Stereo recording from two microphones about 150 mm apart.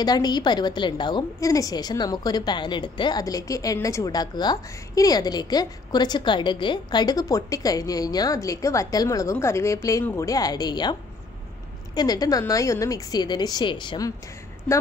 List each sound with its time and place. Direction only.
0.0 s a woman's voice: 25° left (ahead or behind)
14.7 s speech: 10° left (ahead or behind)